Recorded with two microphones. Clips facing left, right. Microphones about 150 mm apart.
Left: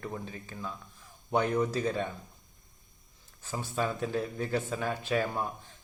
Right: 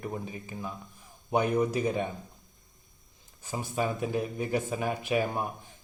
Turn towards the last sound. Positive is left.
turn(degrees=-15)  # may be behind; listen again after turning